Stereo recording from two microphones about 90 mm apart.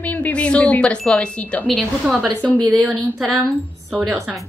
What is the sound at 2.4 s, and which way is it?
Speech, 15° left (ahead or behind).